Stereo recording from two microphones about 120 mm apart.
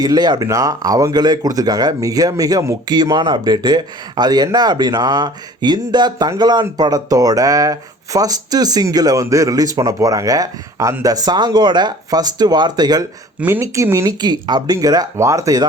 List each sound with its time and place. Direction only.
0.0 s speech: 35° right (ahead or behind)
13.4 s speech: 20° right (ahead or behind)
14.2 s speech: 35° right (ahead or behind)